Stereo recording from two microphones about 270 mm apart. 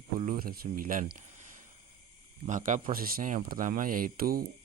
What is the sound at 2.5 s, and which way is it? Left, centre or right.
Speech, right.